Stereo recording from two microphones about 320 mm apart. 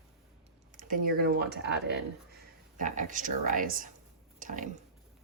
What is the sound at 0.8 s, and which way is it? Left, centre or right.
Speech, right.